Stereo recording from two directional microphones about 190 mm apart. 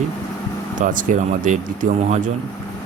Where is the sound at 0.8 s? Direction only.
45° right (ahead or behind).